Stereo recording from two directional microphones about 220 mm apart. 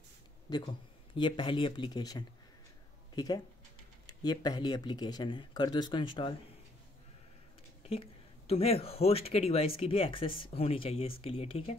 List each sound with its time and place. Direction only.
1.1 s speech: 20° left (ahead or behind)
7.8 s speech: 25° left (ahead or behind)